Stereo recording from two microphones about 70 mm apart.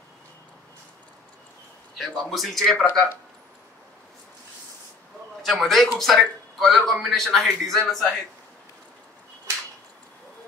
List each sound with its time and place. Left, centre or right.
2.1 s a man's voice: centre
5.4 s a man's voice: centre